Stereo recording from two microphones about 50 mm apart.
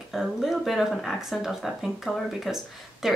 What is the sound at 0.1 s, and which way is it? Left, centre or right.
Speech, centre.